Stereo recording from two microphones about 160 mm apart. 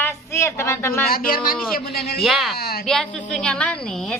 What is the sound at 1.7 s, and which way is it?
Speech, 75° left (ahead or behind).